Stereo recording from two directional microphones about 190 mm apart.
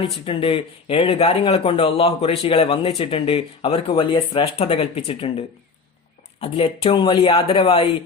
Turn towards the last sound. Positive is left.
turn(degrees=30)  # may be behind; listen again after turning